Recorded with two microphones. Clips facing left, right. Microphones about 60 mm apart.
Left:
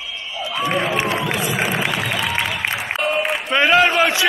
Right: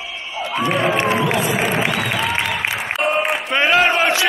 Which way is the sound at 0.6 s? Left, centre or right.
Centre.